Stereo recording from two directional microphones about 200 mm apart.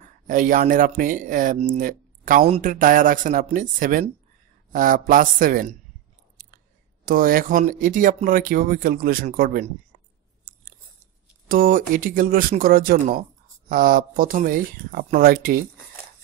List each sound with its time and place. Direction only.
0.0 s speech: 40° right (ahead or behind)
6.4 s a sound: 40° right (ahead or behind)
7.1 s speech: 45° right (ahead or behind)
11.4 s speech: 45° right (ahead or behind)